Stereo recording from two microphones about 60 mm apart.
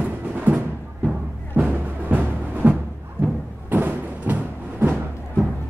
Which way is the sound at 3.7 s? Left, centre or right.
Right.